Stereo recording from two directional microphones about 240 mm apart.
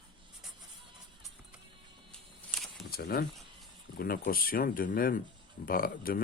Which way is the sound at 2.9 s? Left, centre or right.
Left.